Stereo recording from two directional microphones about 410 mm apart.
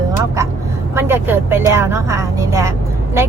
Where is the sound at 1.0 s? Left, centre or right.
Centre.